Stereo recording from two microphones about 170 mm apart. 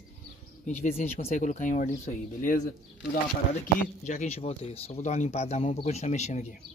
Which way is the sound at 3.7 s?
45° left (ahead or behind).